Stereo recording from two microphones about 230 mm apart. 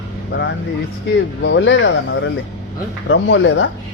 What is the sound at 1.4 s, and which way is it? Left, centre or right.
Speech, left.